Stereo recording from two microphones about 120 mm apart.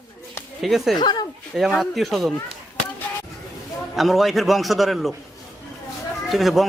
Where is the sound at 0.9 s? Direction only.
35° left (ahead or behind).